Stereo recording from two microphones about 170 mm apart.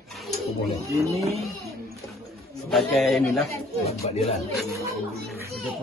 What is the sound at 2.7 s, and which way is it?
Speech, centre (ahead or behind).